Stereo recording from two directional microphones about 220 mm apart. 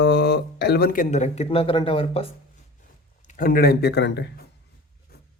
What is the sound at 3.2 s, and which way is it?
A man's voice, 35° left (ahead or behind).